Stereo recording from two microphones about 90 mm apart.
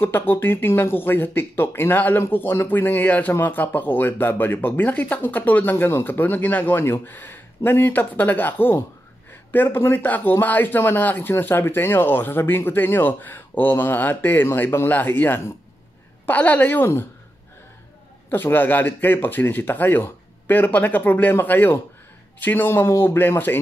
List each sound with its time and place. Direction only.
0.0 s speech: 25° left (ahead or behind)
18.3 s speech: 25° left (ahead or behind)